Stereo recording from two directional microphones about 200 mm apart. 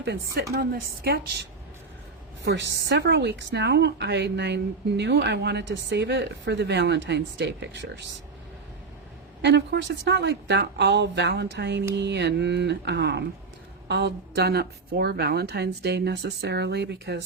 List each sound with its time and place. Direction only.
0.0 s a woman's voice: 55° right (ahead or behind)
2.4 s a woman's voice: 60° right (ahead or behind)
9.4 s a woman's voice: 60° right (ahead or behind)